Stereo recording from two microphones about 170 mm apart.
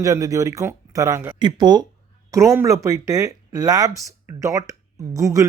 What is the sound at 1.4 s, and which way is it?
Speech, 25° right (ahead or behind).